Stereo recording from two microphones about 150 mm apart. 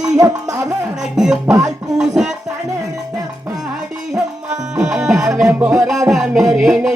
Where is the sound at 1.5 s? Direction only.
20° right (ahead or behind).